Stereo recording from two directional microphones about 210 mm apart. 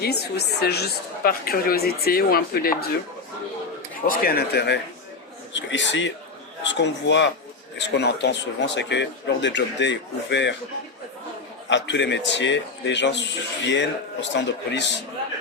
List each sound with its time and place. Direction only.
0.0 s a woman's voice: 50° left (ahead or behind)
4.0 s a woman's voice: 45° left (ahead or behind)
11.7 s a man's voice: 60° left (ahead or behind)